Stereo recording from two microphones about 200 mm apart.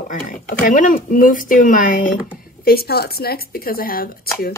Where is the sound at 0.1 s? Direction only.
40° left (ahead or behind).